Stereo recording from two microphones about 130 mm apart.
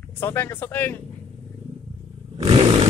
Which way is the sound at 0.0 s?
15° left (ahead or behind).